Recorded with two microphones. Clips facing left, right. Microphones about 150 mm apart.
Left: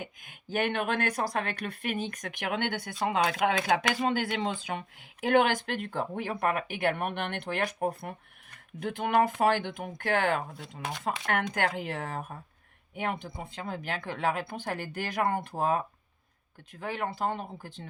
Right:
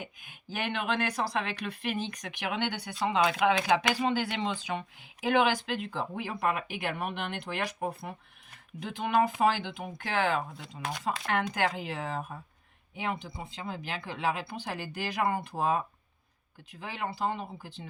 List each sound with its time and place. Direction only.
0.0 s speech: 50° left (ahead or behind)
16.8 s speech: 50° left (ahead or behind)